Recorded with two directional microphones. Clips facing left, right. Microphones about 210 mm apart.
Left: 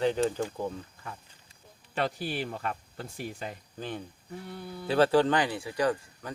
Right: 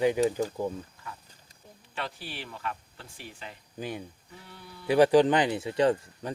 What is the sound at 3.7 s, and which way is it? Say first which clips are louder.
Speech: right 3 dB; 10° right (ahead or behind).